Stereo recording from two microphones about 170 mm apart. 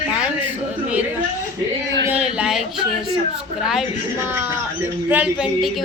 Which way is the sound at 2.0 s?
5° right (ahead or behind).